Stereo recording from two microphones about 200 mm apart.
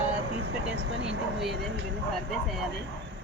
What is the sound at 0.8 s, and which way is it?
Vehicle, 65° right (ahead or behind).